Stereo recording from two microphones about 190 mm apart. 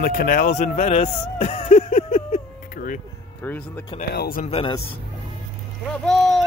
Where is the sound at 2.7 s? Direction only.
45° left (ahead or behind).